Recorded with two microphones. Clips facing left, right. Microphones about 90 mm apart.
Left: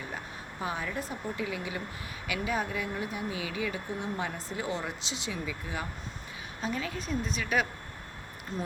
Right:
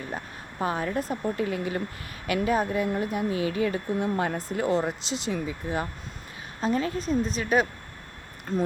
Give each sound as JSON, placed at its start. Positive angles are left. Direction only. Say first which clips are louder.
{"t": 0.6, "sound": "speech", "louder": "right 7 dB", "side_deg": -50}
{"t": 4.7, "sound": "speech", "louder": "right 9 dB", "side_deg": -40}